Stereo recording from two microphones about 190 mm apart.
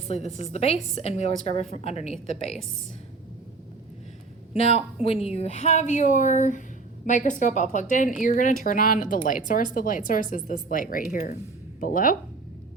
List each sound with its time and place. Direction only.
0.1 s a woman's voice: 35° left (ahead or behind)
4.5 s a woman's voice: 30° left (ahead or behind)